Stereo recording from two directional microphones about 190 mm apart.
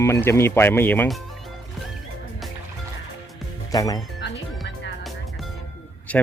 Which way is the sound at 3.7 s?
20° left (ahead or behind).